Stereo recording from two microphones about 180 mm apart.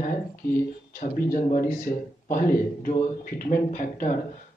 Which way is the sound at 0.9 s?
50° left (ahead or behind).